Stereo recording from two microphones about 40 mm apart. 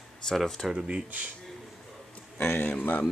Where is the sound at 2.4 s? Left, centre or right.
Left.